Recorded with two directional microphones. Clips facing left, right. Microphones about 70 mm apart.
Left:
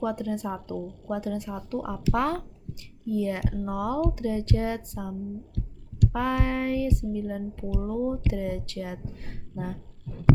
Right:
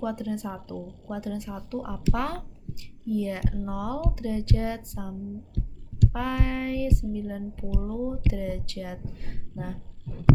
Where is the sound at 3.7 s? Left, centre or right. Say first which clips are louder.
Left 7 dB; left.